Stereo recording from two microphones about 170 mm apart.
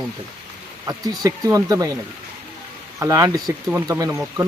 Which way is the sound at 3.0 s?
20° right (ahead or behind).